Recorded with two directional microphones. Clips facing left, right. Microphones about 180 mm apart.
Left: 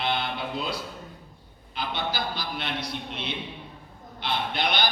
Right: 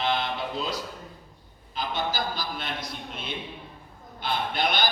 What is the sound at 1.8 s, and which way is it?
Mantra, 45° right (ahead or behind).